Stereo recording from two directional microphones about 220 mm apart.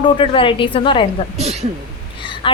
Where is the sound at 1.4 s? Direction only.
30° right (ahead or behind).